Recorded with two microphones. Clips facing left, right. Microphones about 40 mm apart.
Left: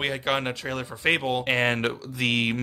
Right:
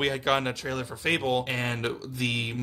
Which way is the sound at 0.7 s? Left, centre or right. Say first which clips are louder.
Left 6 dB; left.